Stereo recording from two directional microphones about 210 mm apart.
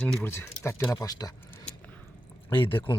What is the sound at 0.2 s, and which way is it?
Speech, 10° left (ahead or behind).